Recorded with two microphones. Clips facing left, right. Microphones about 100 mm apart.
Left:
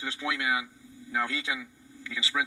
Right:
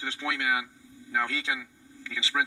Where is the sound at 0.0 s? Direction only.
30° left (ahead or behind).